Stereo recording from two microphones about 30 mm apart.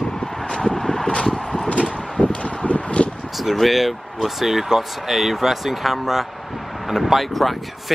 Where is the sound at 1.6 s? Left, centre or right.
Left.